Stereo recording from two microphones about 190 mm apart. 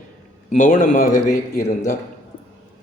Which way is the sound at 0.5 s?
45° left (ahead or behind).